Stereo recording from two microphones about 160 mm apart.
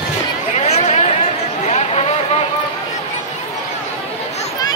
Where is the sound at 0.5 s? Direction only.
45° left (ahead or behind).